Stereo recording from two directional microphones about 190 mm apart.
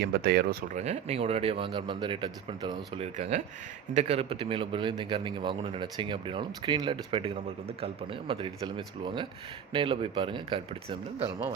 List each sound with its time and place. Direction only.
0.0 s speech: 55° right (ahead or behind)
0.8 s speech: 35° right (ahead or behind)